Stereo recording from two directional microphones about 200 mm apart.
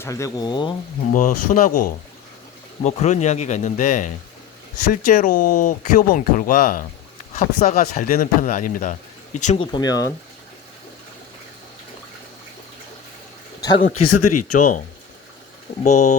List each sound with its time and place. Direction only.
0.0 s speech: 15° left (ahead or behind)
1.1 s speech: 40° left (ahead or behind)
9.7 s speech: 20° left (ahead or behind)
13.6 s speech: 20° left (ahead or behind)
14.4 s speech: 40° left (ahead or behind)
15.8 s speech: 35° left (ahead or behind)